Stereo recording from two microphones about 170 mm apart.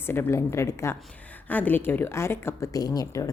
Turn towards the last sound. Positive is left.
turn(degrees=20)  # may be behind; listen again after turning